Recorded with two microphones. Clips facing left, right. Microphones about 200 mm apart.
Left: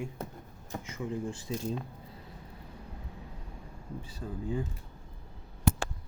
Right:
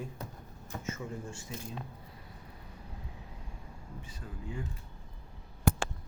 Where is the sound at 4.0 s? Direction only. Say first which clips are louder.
Left 8 dB; 35° left (ahead or behind).